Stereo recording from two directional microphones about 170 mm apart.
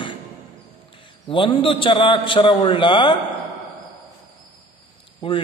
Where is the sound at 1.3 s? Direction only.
30° left (ahead or behind).